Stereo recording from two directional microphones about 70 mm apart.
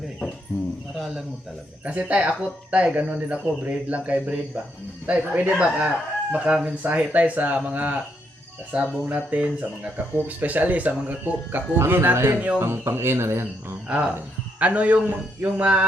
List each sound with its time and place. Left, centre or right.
0.9 s speech: centre
1.8 s speech: centre
6.8 s speech: right
12.5 s speech: right
13.8 s speech: centre